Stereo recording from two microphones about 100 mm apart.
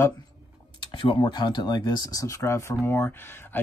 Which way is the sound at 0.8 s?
55° left (ahead or behind).